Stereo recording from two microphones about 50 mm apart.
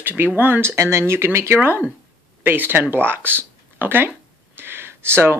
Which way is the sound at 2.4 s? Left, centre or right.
Right.